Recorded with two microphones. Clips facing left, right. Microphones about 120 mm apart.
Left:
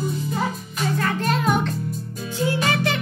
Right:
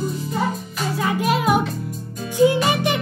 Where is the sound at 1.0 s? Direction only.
10° right (ahead or behind).